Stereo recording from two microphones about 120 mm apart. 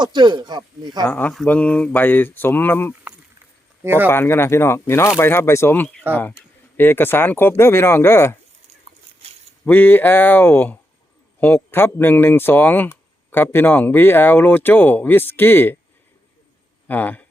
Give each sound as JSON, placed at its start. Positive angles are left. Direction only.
{"t": 0.0, "sound": "speech", "side_deg": -40}
{"t": 1.0, "sound": "speech", "side_deg": 15}
{"t": 3.8, "sound": "speech", "side_deg": -20}
{"t": 4.1, "sound": "speech", "side_deg": 20}
{"t": 9.6, "sound": "speech", "side_deg": 15}
{"t": 16.9, "sound": "speech", "side_deg": 15}